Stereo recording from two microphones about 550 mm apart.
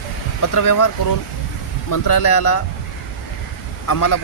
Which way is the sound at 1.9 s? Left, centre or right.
Left.